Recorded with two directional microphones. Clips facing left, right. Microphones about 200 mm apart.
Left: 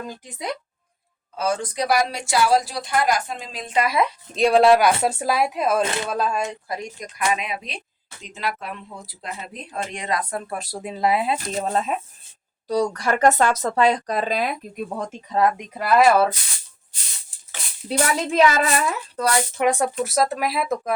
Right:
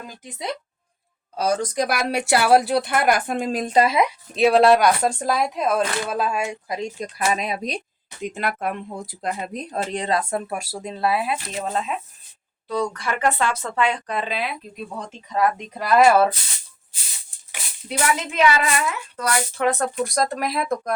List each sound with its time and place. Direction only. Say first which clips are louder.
1.4 s speech: right 2 dB; 40° right (ahead or behind)
3.8 s speech: right 2 dB; 25° right (ahead or behind)
4.4 s speech: even; centre (ahead or behind)
6.7 s speech: right 3 dB; 25° right (ahead or behind)
7.3 s speech: right 1 dB; 40° right (ahead or behind)
8.2 s speech: right 4 dB; 55° right (ahead or behind); by 10.4 s 25° right (ahead or behind)
10.4 s speech: right 1 dB; 5° right (ahead or behind)
10.8 s speech: left 2 dB; 15° left (ahead or behind)
11.3 s speech: left 3 dB; 40° left (ahead or behind)
15.5 s speech: even; 5° left (ahead or behind)
18.0 s speech: left 1 dB; 35° left (ahead or behind)
19.5 s speech: left 1 dB; 15° left (ahead or behind)